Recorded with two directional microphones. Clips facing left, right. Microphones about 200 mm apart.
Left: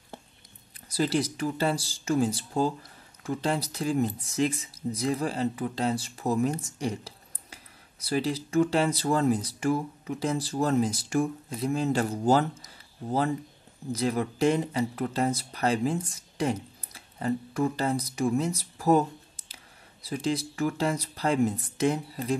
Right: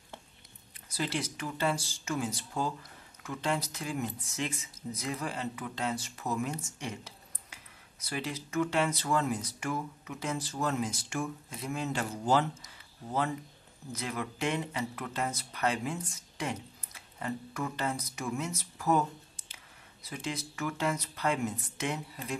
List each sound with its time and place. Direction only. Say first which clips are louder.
0.8 s speech: left 8 dB; 35° left (ahead or behind)